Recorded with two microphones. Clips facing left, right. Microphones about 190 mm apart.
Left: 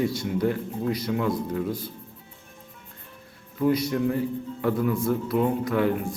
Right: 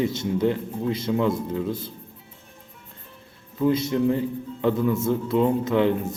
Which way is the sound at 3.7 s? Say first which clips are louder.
Right 3 dB; 25° right (ahead or behind).